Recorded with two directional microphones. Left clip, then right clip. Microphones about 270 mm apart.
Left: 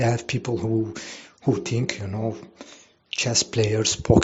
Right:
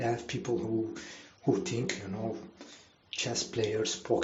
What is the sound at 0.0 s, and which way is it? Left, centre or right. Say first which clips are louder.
Speech: left 8 dB; left.